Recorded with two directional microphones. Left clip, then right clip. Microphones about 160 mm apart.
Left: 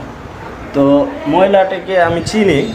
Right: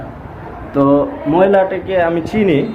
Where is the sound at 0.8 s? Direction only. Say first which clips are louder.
Left 1 dB; 25° right (ahead or behind).